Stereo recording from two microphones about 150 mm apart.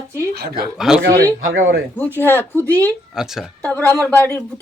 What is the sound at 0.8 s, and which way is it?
Speech, centre (ahead or behind).